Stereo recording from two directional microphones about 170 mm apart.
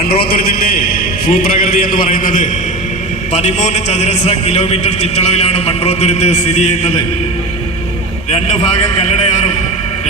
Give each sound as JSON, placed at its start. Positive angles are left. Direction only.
{"t": 0.2, "sound": "music", "side_deg": 60}
{"t": 1.3, "sound": "a man's voice", "side_deg": 60}
{"t": 8.3, "sound": "a man's voice", "side_deg": 45}